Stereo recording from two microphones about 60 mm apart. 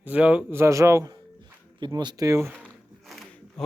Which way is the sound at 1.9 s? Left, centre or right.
Right.